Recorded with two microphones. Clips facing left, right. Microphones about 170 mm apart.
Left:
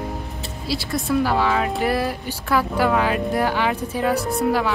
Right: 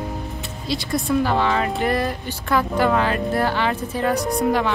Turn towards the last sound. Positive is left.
turn(degrees=5)  # may be behind; listen again after turning